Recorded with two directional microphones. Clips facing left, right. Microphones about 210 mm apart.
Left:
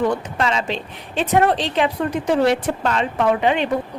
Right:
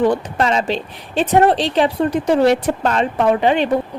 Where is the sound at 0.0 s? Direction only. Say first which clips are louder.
Right 4 dB; 35° right (ahead or behind).